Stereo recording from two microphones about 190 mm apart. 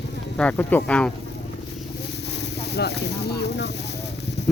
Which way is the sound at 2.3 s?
60° left (ahead or behind).